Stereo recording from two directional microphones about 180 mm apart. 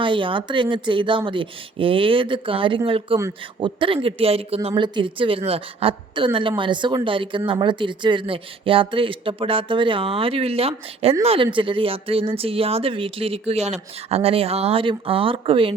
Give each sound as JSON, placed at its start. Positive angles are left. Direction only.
{"t": 0.0, "sound": "speech", "side_deg": -30}
{"t": 3.2, "sound": "a man's voice", "side_deg": -15}
{"t": 3.8, "sound": "speech", "side_deg": -30}